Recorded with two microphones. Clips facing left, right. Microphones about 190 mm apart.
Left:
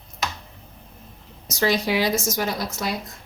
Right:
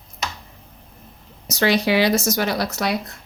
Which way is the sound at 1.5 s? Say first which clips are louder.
Right 3 dB; 70° right (ahead or behind).